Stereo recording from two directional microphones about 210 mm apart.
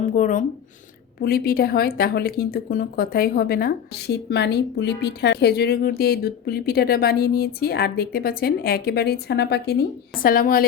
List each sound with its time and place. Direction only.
0.0 s speech: 40° left (ahead or behind)